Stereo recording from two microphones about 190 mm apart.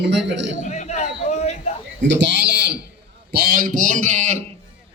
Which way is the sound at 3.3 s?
50° right (ahead or behind).